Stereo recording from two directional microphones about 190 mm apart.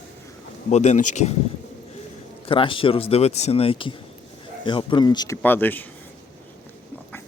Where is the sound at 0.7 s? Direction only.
35° left (ahead or behind).